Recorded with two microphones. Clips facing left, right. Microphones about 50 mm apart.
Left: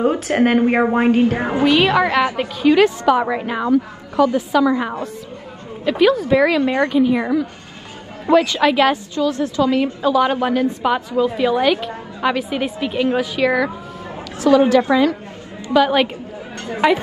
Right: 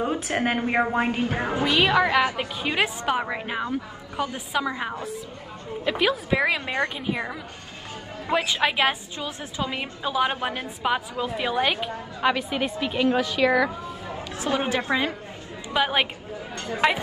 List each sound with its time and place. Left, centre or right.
0.0 s a woman's voice: left
2.6 s a woman's voice: centre
3.3 s a woman's voice: centre
4.4 s a woman's voice: centre
5.9 s a woman's voice: centre
8.3 s a woman's voice: centre
10.9 s a woman's voice: centre
12.2 s a woman's voice: centre
14.4 s a woman's voice: right
15.7 s a woman's voice: centre
16.5 s speech: left